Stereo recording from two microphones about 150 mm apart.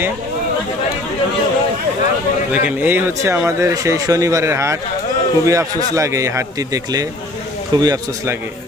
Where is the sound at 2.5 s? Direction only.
10° right (ahead or behind).